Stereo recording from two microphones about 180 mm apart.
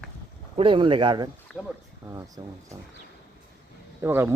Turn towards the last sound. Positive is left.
turn(degrees=-15)  # may be behind; listen again after turning